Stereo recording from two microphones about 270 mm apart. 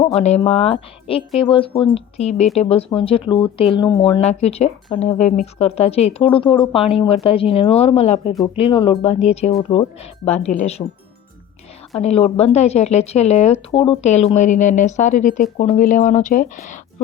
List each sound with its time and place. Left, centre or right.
0.0 s speech: left
11.9 s speech: left